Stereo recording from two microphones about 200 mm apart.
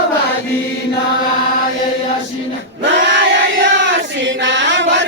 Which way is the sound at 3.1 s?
65° right (ahead or behind).